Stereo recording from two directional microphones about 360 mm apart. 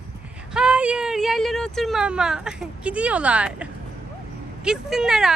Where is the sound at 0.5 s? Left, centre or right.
Centre.